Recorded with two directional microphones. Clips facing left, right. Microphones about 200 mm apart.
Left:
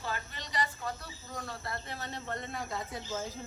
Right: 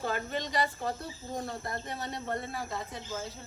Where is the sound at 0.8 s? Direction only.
30° right (ahead or behind); by 2.4 s 15° right (ahead or behind).